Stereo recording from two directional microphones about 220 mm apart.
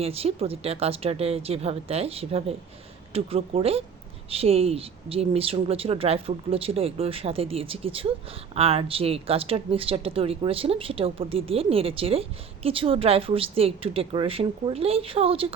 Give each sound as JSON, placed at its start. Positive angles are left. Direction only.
{"t": 0.0, "sound": "speech", "side_deg": -25}